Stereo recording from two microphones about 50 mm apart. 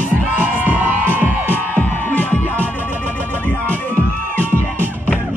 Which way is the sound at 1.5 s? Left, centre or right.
Left.